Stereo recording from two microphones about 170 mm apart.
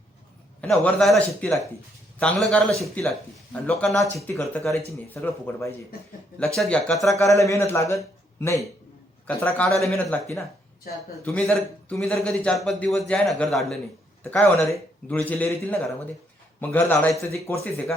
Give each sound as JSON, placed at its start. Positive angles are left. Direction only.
{"t": 0.6, "sound": "a man's voice", "side_deg": 5}
{"t": 5.2, "sound": "a man's voice", "side_deg": 15}
{"t": 7.1, "sound": "a man's voice", "side_deg": 20}
{"t": 11.3, "sound": "a man's voice", "side_deg": 5}